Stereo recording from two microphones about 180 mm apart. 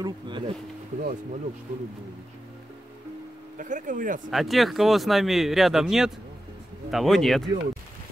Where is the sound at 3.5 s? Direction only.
45° right (ahead or behind).